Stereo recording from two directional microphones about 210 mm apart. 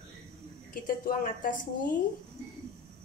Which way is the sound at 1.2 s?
40° left (ahead or behind).